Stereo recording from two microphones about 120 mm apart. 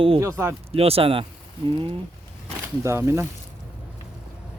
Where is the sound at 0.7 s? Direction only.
55° right (ahead or behind).